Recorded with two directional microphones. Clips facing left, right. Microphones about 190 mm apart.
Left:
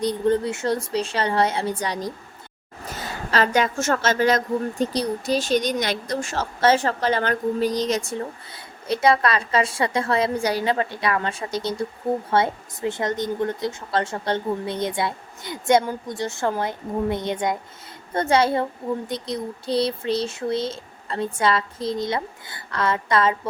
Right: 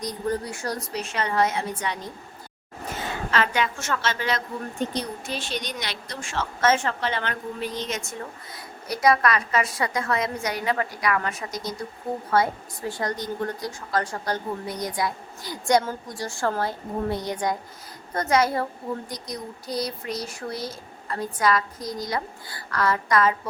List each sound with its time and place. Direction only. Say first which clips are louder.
0.0 s a woman's voice: left 7 dB; 30° left (ahead or behind)